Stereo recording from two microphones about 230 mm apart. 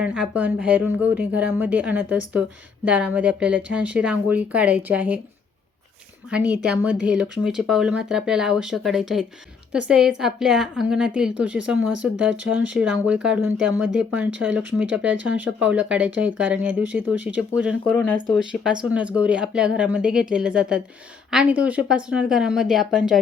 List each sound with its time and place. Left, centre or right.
0.0 s a woman's voice: centre
6.3 s a woman's voice: centre
17.9 s speech: centre
18.3 s a woman's voice: centre